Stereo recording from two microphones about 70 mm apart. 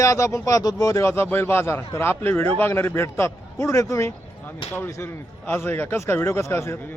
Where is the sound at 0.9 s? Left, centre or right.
Left.